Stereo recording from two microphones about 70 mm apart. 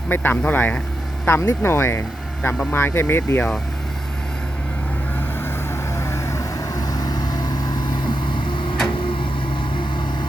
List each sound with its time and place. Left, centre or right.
0.1 s speech: left
1.3 s speech: left
6.0 s vehicle: left
6.7 s vehicle: left